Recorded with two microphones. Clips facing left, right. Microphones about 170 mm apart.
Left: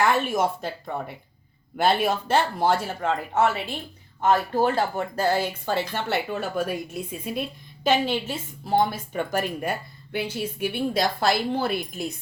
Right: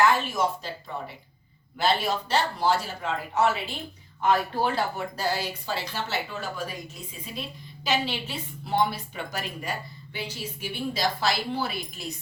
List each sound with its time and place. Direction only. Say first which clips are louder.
0.3 s a woman's voice: left 3 dB; 55° left (ahead or behind)
7.9 s a woman's voice: left 6 dB; 50° left (ahead or behind)